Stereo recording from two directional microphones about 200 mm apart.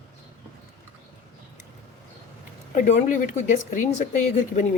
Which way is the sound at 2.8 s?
35° left (ahead or behind).